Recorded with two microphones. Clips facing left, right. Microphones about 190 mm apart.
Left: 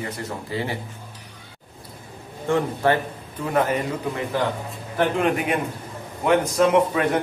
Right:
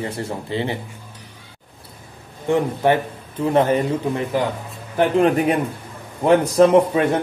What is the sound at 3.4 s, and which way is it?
Speech, 30° right (ahead or behind).